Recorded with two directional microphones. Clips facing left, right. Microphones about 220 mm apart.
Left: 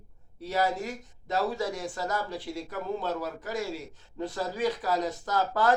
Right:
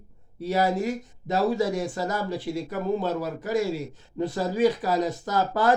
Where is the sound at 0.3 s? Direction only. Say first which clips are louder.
Right 5 dB; 10° right (ahead or behind).